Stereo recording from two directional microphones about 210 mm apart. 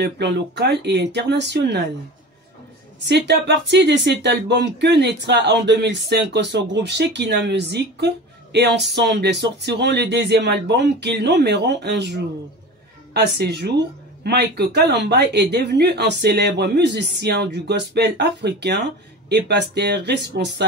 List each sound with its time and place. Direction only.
0.0 s speech: 55° right (ahead or behind)
3.1 s speech: 50° right (ahead or behind)